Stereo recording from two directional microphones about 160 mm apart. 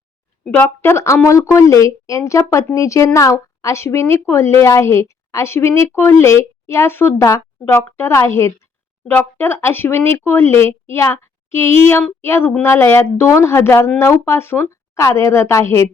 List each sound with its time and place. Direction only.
0.4 s speech: 10° left (ahead or behind)